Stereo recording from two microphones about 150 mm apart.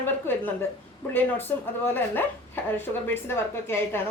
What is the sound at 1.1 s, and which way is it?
A woman's voice, 15° left (ahead or behind).